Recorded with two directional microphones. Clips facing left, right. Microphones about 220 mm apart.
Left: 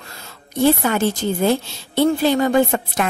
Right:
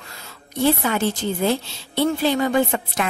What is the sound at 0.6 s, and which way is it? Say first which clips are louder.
A woman's voice: left 3 dB; 45° left (ahead or behind).